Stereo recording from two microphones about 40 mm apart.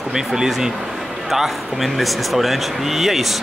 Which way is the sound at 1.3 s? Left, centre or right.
Centre.